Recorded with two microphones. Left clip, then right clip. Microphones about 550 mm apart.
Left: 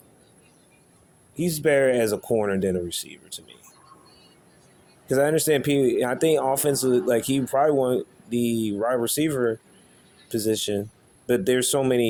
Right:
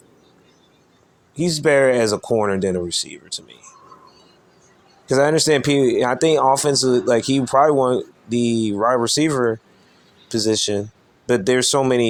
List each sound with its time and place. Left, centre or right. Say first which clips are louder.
1.4 s speech: right 5 dB; left
5.0 s speech: right 5 dB; left